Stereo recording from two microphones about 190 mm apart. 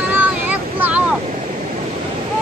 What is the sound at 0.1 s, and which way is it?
Vehicle, 10° right (ahead or behind).